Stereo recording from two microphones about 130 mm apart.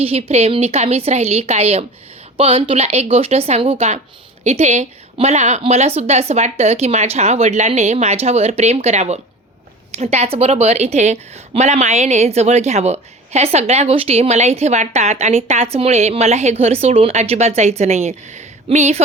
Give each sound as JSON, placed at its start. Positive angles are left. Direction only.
{"t": 0.0, "sound": "a woman's voice", "side_deg": -50}